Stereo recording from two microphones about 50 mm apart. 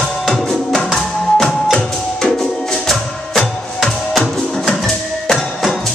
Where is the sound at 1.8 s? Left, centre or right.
Centre.